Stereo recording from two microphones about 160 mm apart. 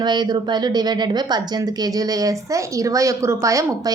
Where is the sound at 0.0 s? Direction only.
25° right (ahead or behind).